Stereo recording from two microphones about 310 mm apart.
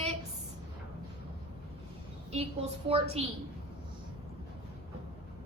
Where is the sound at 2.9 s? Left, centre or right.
Centre.